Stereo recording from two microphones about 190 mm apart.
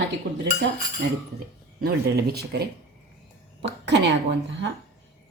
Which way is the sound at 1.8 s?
55° right (ahead or behind).